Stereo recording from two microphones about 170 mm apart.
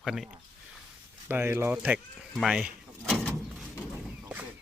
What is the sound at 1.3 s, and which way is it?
Speech, 15° right (ahead or behind).